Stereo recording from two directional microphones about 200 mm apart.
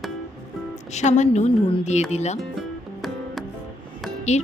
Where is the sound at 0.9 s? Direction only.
35° left (ahead or behind).